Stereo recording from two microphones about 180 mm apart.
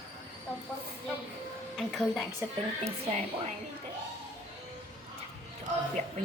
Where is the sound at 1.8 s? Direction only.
Centre (ahead or behind).